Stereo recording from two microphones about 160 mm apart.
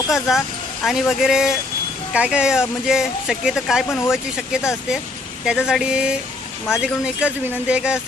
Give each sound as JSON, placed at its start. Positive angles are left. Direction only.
{"t": 0.1, "sound": "speech", "side_deg": 0}
{"t": 3.8, "sound": "speech", "side_deg": 15}
{"t": 4.1, "sound": "speech", "side_deg": -5}